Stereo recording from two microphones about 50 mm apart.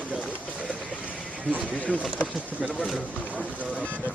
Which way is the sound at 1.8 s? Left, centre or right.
Left.